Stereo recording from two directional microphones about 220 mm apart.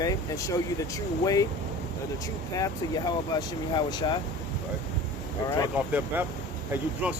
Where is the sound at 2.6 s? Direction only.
20° left (ahead or behind).